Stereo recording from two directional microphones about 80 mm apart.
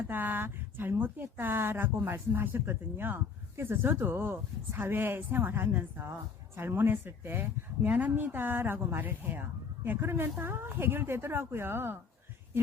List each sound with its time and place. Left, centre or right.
0.1 s speech: right